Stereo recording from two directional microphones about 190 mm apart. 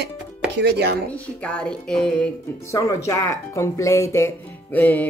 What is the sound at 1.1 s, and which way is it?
Speech, 5° left (ahead or behind).